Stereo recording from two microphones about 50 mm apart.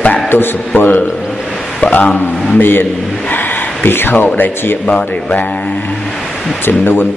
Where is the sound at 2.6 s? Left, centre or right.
Left.